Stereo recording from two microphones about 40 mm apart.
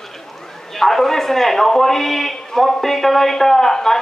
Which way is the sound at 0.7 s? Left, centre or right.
Centre.